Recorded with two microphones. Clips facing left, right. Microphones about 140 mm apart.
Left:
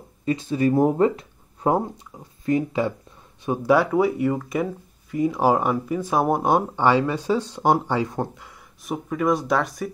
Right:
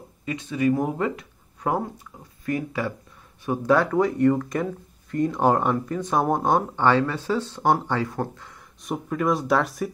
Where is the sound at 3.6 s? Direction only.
10° left (ahead or behind).